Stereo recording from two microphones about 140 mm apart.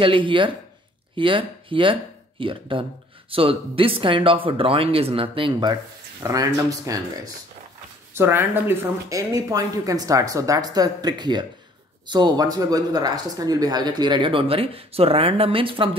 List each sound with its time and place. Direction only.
0.0 s speech: 40° right (ahead or behind)
8.1 s speech: 15° right (ahead or behind); by 16.0 s 40° right (ahead or behind)